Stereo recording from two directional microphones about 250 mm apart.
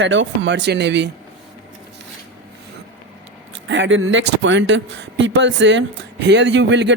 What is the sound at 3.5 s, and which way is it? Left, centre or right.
Speech, right.